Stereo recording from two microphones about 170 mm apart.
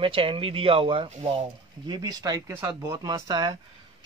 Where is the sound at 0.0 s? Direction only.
30° right (ahead or behind).